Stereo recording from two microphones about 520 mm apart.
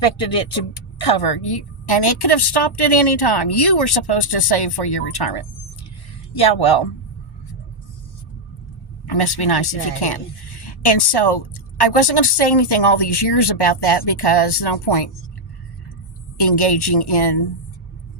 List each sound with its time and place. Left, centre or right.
0.3 s a woman's voice: left
9.0 s a woman's voice: left
16.4 s a woman's voice: left